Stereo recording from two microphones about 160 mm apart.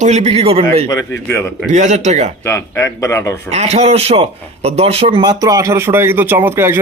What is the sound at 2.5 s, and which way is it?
Speech, 20° left (ahead or behind).